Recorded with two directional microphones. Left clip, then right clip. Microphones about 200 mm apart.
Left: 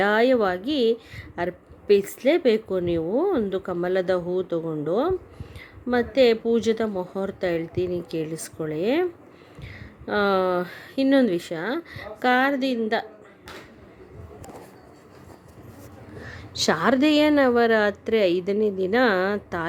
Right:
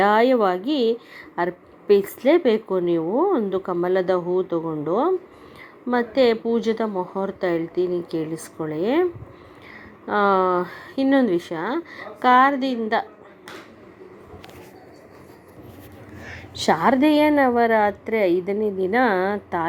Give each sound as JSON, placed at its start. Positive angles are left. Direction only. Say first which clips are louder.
{"t": 0.0, "sound": "a woman's voice", "louder": "right 3 dB", "side_deg": 15}
{"t": 10.1, "sound": "a woman's voice", "louder": "right 3 dB", "side_deg": 15}
{"t": 16.6, "sound": "a woman's voice", "louder": "right 3 dB", "side_deg": 10}